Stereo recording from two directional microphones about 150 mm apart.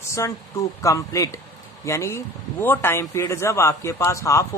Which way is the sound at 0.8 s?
20° left (ahead or behind).